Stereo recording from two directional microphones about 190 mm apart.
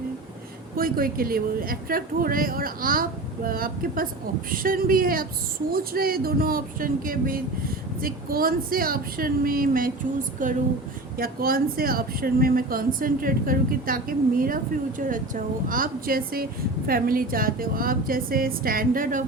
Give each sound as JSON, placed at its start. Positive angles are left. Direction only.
{"t": 0.8, "sound": "speech", "side_deg": -50}